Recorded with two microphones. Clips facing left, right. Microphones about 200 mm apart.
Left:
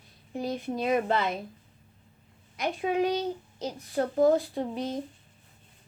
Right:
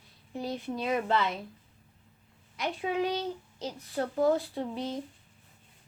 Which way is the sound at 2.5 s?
45° left (ahead or behind).